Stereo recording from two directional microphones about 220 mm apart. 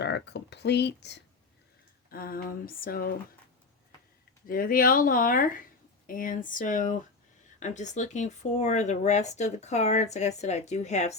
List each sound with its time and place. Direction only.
0.0 s speech: 50° left (ahead or behind)
4.4 s speech: 40° left (ahead or behind)